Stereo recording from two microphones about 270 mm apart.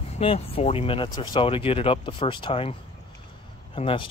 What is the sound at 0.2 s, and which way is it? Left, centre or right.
Speech, left.